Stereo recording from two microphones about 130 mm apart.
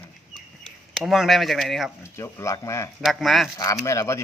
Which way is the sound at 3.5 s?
25° left (ahead or behind).